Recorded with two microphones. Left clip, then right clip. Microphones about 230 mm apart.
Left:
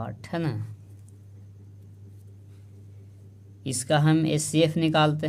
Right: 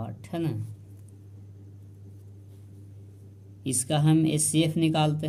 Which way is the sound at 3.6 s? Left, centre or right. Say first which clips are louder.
Left 4 dB; left.